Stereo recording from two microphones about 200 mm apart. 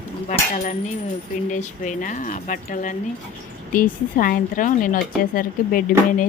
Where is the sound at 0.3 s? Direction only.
40° left (ahead or behind).